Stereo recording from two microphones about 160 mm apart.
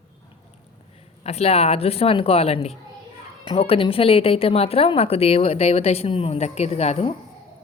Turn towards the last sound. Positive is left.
turn(degrees=40)  # may be behind; listen again after turning